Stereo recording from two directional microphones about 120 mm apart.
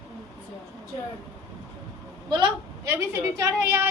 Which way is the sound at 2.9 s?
20° right (ahead or behind).